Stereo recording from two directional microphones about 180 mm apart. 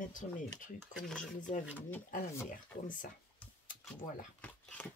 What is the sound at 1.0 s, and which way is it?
Speech, 5° left (ahead or behind).